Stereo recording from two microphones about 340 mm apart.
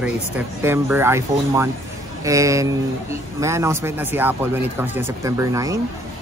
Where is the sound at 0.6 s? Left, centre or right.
Centre.